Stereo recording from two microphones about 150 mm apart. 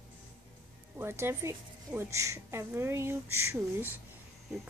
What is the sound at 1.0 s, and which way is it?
A woman's voice, 15° right (ahead or behind).